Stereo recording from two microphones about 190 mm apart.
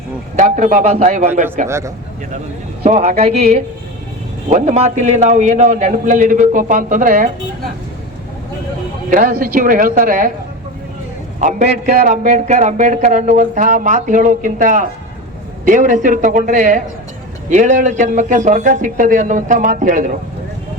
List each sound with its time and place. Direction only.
0.3 s a man's voice: 40° right (ahead or behind)
1.6 s speech: 15° right (ahead or behind)
2.8 s a man's voice: 35° right (ahead or behind)
9.0 s speech: 45° right (ahead or behind)
11.3 s a man's voice: 40° right (ahead or behind)